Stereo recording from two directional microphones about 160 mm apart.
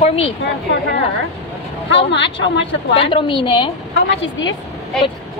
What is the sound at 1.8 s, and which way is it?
Speech, 90° left.